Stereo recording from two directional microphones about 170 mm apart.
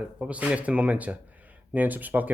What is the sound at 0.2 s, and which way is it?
Speech, 5° right (ahead or behind).